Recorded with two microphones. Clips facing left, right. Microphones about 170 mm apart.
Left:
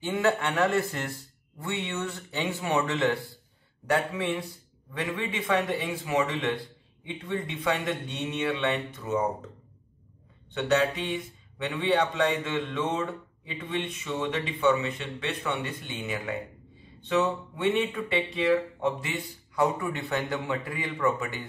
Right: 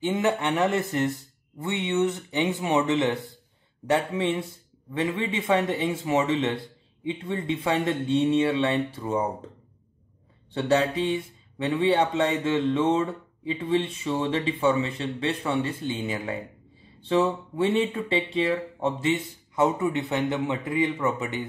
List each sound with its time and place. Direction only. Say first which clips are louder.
0.0 s speech: right 2 dB; 20° right (ahead or behind)
10.5 s speech: right 2 dB; 30° right (ahead or behind)